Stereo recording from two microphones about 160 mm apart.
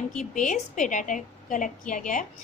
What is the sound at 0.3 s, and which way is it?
A woman's voice, 50° left (ahead or behind).